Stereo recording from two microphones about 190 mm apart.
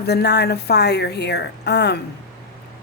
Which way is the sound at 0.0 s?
60° left (ahead or behind).